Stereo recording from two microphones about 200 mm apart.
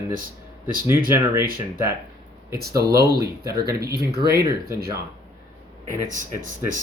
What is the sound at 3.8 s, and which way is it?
Speech, 50° right (ahead or behind).